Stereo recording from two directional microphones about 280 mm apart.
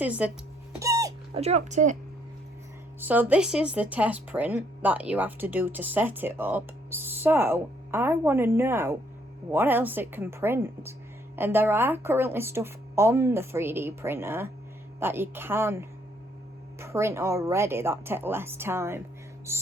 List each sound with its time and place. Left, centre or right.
0.0 s speech: centre
0.8 s music: centre
3.0 s speech: centre